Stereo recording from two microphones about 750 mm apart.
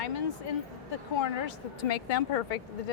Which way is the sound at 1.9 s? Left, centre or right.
Left.